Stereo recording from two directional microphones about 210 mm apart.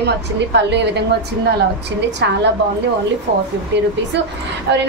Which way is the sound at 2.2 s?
60° right (ahead or behind).